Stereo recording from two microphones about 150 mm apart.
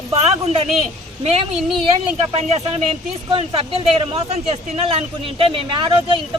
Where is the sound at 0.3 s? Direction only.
45° right (ahead or behind).